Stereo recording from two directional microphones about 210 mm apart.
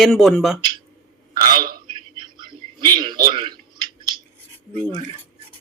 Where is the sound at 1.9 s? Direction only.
20° right (ahead or behind).